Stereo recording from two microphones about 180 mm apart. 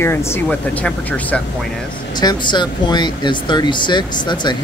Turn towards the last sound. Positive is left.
turn(degrees=25)  # may be behind; listen again after turning